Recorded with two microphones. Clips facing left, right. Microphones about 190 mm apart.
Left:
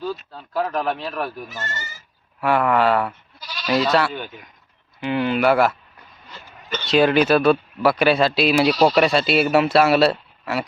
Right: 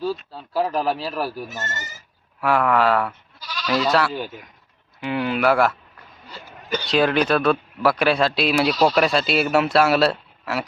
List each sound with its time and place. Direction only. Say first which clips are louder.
0.0 s speech: right 2 dB; 5° right (ahead or behind)
1.5 s speech: even; 20° right (ahead or behind)
2.4 s speech: left 1 dB; centre (ahead or behind)
6.8 s speech: left 3 dB; centre (ahead or behind)